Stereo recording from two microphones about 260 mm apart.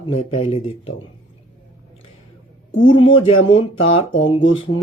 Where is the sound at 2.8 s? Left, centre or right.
Centre.